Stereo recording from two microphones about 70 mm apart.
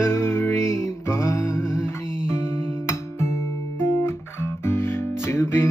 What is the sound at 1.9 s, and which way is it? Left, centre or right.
Music, left.